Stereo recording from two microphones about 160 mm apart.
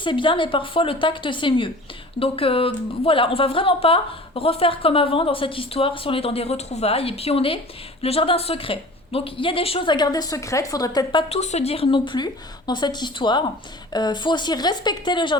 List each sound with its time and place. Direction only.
0.0 s a woman's voice: 30° left (ahead or behind)
11.3 s a woman's voice: 45° left (ahead or behind)